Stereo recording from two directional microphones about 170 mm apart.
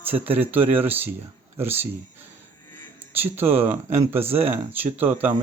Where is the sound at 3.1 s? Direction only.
10° right (ahead or behind).